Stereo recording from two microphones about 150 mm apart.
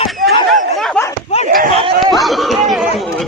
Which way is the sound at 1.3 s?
50° left (ahead or behind).